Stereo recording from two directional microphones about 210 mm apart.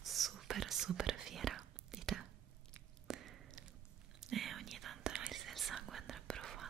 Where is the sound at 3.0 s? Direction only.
Centre (ahead or behind).